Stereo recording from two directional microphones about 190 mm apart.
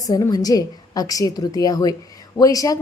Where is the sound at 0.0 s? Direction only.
20° left (ahead or behind).